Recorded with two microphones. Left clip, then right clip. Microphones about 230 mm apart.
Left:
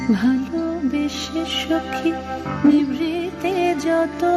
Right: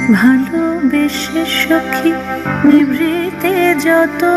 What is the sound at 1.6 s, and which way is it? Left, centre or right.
Music, right.